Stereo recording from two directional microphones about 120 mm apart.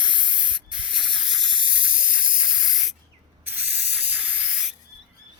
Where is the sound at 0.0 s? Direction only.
5° right (ahead or behind).